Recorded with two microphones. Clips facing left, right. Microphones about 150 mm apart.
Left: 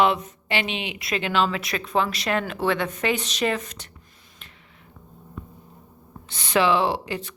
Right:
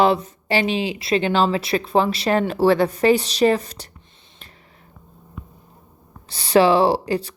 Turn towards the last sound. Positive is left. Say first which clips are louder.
# right 7 dB
turn(degrees=-35)  # may be behind; listen again after turning